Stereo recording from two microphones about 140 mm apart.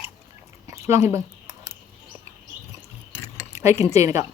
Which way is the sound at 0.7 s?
20° right (ahead or behind).